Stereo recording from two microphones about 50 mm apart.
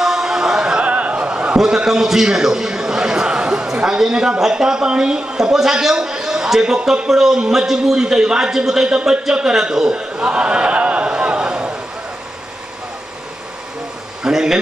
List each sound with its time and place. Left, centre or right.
0.0 s chant: centre
0.8 s a sound: right
3.8 s a man's voice: centre
14.2 s a man's voice: centre